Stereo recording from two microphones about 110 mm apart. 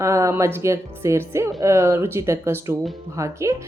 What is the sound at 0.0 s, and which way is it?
A woman's voice, 25° right (ahead or behind).